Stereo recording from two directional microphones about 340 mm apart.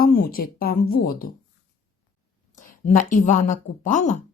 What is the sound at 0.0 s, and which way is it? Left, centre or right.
Speech, left.